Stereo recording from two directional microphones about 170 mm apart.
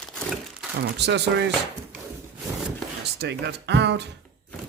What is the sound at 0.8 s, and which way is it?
Speech, 85° right.